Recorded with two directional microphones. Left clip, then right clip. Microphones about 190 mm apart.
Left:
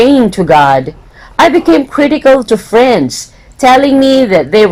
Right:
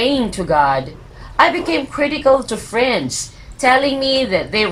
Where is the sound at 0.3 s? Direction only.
45° left (ahead or behind).